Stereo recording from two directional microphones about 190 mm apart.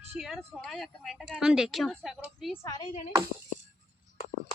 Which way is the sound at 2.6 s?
25° left (ahead or behind).